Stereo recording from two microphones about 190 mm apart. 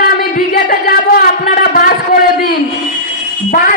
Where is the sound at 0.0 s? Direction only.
55° left (ahead or behind).